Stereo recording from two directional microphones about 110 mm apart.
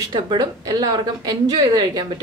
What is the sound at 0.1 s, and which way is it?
A woman's voice, 40° right (ahead or behind).